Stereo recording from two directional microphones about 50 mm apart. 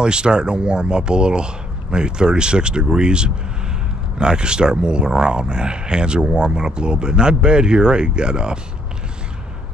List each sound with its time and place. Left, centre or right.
0.0 s speech: centre